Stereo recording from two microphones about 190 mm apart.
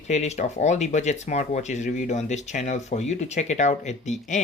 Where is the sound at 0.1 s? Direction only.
35° left (ahead or behind).